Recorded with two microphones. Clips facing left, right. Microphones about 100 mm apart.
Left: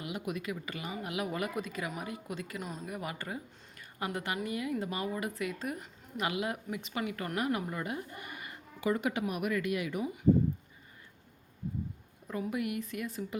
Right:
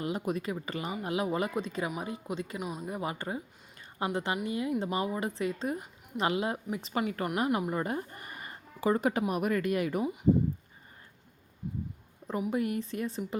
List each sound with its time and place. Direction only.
0.0 s a woman's voice: 35° right (ahead or behind)
2.6 s speech: 10° right (ahead or behind)
2.8 s a woman's voice: 25° right (ahead or behind); by 10.0 s 40° right (ahead or behind)
12.5 s speech: 35° right (ahead or behind)